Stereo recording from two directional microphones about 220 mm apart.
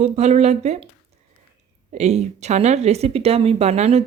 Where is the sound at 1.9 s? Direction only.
30° right (ahead or behind).